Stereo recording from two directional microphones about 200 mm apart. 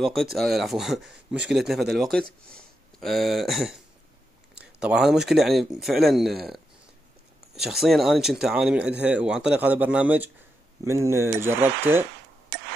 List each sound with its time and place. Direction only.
0.0 s speech: centre (ahead or behind)